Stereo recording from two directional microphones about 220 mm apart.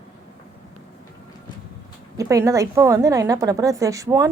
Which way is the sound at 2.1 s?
15° right (ahead or behind).